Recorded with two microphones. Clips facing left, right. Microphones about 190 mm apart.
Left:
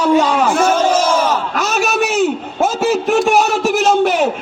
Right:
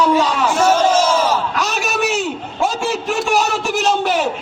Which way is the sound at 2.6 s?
40° left (ahead or behind).